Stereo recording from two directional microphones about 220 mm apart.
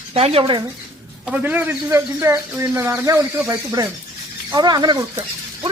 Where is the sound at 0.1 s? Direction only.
25° right (ahead or behind).